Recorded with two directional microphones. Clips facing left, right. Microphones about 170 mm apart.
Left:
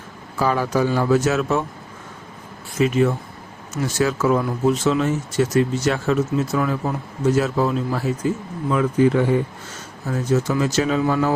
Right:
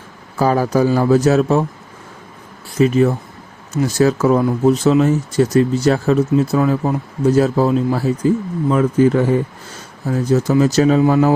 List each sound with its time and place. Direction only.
0.3 s speech: 40° right (ahead or behind)
2.7 s speech: 35° right (ahead or behind)